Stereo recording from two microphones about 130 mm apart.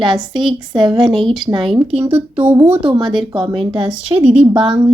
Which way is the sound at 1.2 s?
Centre (ahead or behind).